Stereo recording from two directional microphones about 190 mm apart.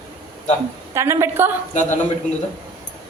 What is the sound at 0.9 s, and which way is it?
Speech, 15° right (ahead or behind).